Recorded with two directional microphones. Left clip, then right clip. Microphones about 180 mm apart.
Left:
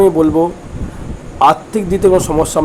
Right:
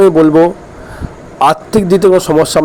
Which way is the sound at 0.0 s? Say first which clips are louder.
Right 4 dB; 30° right (ahead or behind).